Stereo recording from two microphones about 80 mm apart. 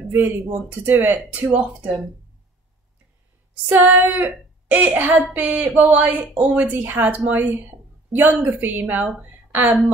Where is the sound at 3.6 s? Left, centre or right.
Right.